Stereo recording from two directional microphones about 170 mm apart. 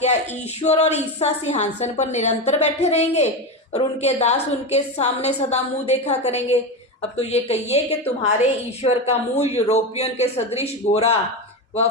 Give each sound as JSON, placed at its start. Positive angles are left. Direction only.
{"t": 0.6, "sound": "a woman's voice", "side_deg": 40}